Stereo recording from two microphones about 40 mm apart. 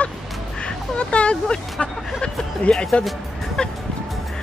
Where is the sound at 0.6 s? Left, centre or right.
Left.